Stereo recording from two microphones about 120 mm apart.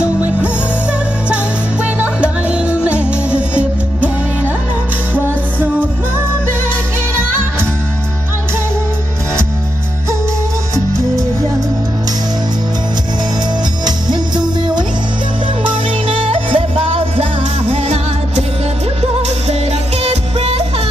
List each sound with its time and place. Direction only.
0.0 s music: 10° right (ahead or behind)
2.0 s music: 10° right (ahead or behind)
5.1 s music: 15° right (ahead or behind)
13.8 s music: 35° right (ahead or behind); by 18.4 s 55° right (ahead or behind)
20.0 s music: 60° right (ahead or behind)